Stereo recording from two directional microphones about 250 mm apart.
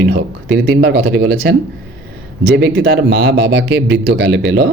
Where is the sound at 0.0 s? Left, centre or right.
Right.